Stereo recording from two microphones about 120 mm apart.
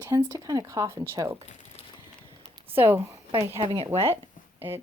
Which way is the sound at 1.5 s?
75° left (ahead or behind).